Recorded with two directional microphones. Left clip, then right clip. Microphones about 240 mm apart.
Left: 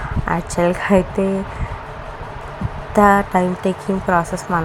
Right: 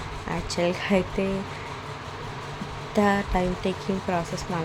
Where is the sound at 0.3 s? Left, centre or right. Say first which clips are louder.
Left 8 dB; centre.